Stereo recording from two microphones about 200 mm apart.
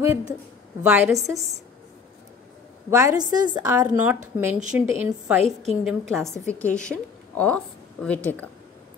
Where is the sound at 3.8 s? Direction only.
10° right (ahead or behind); by 8.4 s 5° left (ahead or behind).